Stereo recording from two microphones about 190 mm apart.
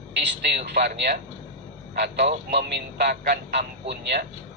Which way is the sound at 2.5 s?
65° right (ahead or behind).